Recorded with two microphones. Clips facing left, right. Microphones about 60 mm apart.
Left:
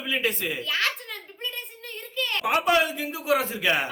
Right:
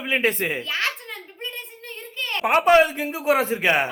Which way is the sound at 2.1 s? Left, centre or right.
Right.